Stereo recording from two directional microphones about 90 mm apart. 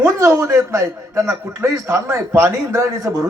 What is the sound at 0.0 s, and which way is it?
A man's voice, 35° right (ahead or behind).